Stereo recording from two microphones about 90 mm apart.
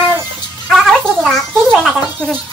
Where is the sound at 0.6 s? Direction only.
Centre (ahead or behind).